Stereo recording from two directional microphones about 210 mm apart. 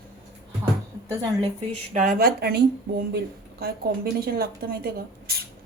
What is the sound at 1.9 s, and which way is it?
A woman's voice, 40° right (ahead or behind).